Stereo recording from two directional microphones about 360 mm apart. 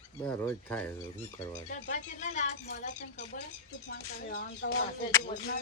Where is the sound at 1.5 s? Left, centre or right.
Left.